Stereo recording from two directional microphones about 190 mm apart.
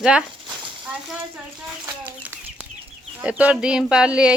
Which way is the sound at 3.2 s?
5° right (ahead or behind).